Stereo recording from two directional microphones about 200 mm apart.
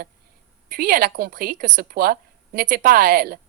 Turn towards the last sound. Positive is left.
turn(degrees=-50)  # may be behind; listen again after turning